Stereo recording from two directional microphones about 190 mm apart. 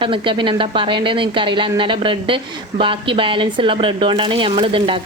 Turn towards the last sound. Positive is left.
turn(degrees=-25)  # may be behind; listen again after turning